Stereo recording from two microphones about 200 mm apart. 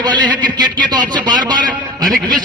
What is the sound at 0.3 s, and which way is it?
A man's voice, 20° right (ahead or behind).